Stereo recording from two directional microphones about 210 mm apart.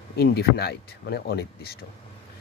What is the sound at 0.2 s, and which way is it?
Speech, 50° left (ahead or behind).